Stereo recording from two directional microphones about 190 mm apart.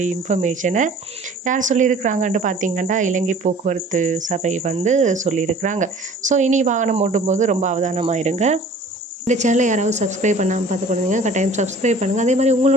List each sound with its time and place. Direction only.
0.0 s speech: 40° right (ahead or behind)